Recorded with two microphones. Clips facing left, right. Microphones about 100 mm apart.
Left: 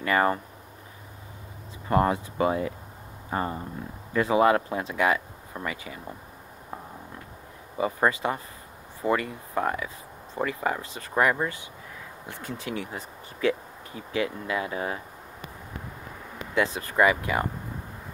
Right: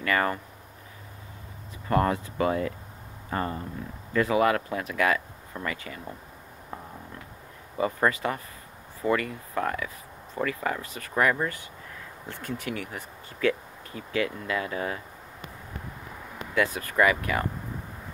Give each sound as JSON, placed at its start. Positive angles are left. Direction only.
{"t": 0.0, "sound": "speech", "side_deg": 25}
{"t": 1.9, "sound": "speech", "side_deg": 20}
{"t": 7.7, "sound": "speech", "side_deg": 15}
{"t": 16.5, "sound": "speech", "side_deg": 25}